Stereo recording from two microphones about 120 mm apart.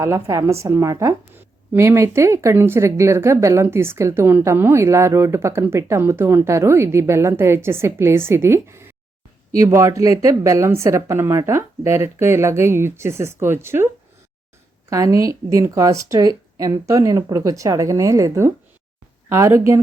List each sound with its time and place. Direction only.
0.0 s speech: 25° right (ahead or behind)